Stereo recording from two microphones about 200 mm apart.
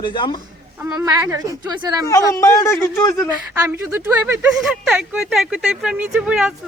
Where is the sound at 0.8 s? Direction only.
10° right (ahead or behind).